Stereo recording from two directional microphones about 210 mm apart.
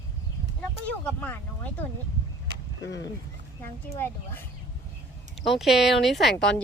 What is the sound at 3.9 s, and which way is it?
Speech, 10° left (ahead or behind).